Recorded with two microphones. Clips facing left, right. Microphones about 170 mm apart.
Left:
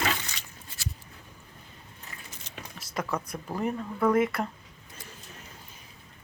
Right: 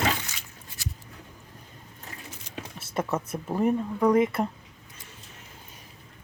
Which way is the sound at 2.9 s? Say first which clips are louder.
Right 3 dB; 25° right (ahead or behind).